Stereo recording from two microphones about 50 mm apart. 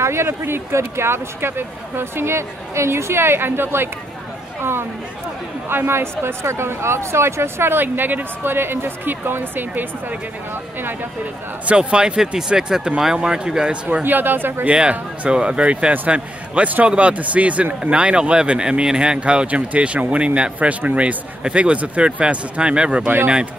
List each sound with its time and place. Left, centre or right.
0.0 s speech: right
11.6 s speech: right
14.0 s speech: right
14.7 s speech: right